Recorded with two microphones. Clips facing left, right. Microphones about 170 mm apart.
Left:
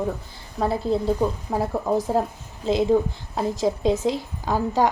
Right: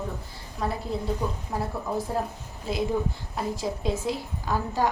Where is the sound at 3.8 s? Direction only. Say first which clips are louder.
Left 7 dB; 90° left.